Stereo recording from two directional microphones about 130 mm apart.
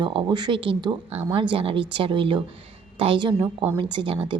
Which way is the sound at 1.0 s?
55° right (ahead or behind).